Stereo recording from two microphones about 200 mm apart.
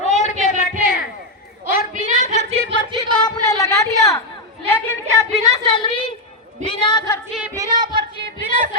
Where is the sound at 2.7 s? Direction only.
20° left (ahead or behind).